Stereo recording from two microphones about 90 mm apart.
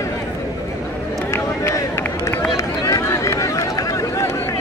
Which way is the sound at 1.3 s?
35° left (ahead or behind).